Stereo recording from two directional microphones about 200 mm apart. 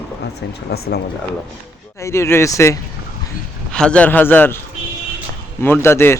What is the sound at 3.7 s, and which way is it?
Speech, 5° left (ahead or behind).